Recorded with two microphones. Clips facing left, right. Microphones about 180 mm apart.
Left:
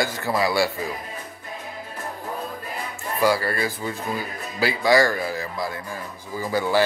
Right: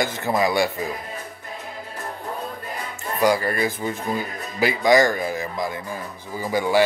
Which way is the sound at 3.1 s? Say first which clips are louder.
Right 1 dB; 20° right (ahead or behind).